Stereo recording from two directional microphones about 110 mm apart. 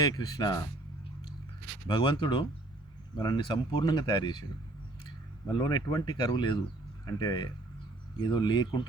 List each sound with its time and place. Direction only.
0.0 s speech: 40° left (ahead or behind)
1.9 s speech: 50° left (ahead or behind)